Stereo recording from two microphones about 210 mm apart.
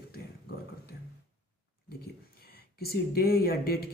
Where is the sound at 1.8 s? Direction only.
50° left (ahead or behind).